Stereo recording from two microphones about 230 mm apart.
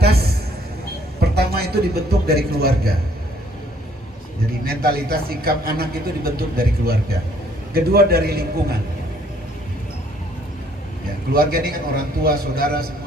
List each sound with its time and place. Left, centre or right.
0.0 s a sound: right
1.2 s a man's voice: right
4.6 s a man's voice: right
11.3 s speech: right